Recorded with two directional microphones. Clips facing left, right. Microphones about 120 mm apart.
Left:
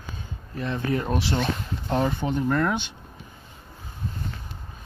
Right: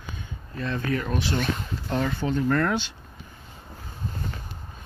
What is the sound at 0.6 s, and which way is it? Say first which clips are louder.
Speech: left 1 dB; 20° left (ahead or behind).